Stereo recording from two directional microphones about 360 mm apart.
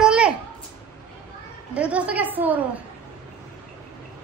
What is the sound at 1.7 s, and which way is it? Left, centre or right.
Speech, centre.